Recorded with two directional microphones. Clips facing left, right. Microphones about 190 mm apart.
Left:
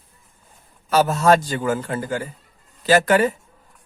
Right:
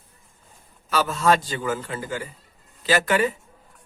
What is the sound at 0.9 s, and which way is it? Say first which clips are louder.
Speech: left 5 dB; 45° left (ahead or behind).